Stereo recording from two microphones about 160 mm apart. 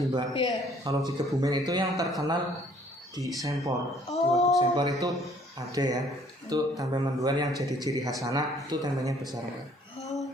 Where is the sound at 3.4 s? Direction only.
20° right (ahead or behind).